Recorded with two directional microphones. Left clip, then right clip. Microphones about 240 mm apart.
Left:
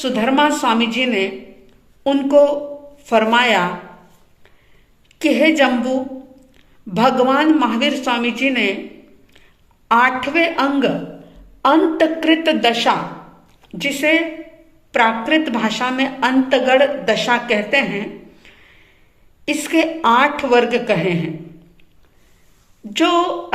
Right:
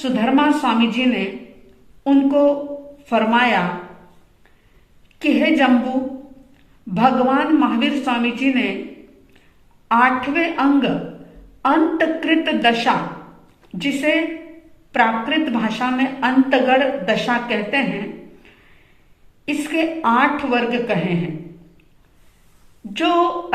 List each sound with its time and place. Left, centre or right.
0.0 s a woman's voice: left
5.2 s a woman's voice: left
6.9 s a woman's voice: left
9.9 s a woman's voice: left
19.5 s a woman's voice: left
22.9 s a woman's voice: left